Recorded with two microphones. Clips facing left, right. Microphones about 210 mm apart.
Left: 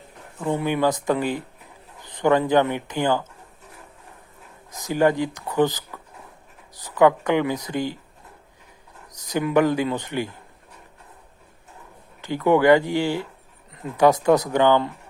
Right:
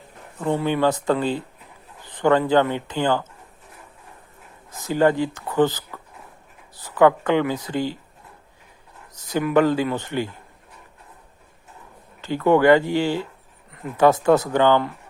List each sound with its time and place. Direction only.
0.6 s speech: 10° left (ahead or behind)
4.7 s speech: 15° left (ahead or behind)
7.0 s speech: 15° left (ahead or behind)
9.2 s speech: 15° left (ahead or behind)
12.2 s speech: 15° left (ahead or behind)